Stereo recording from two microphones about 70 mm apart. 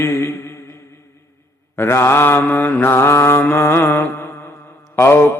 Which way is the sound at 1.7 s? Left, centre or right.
Left.